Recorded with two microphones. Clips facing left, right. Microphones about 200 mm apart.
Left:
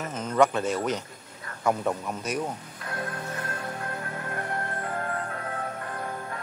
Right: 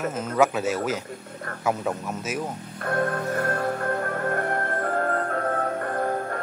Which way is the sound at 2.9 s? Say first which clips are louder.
Right 9 dB; 55° right (ahead or behind).